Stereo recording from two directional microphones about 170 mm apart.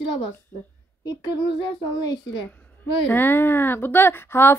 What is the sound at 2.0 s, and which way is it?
Speech, 25° left (ahead or behind).